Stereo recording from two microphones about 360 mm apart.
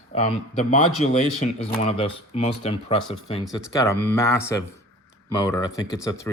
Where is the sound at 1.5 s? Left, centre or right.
Centre.